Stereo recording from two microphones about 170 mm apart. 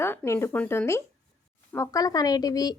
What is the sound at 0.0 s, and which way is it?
Speech, 15° left (ahead or behind).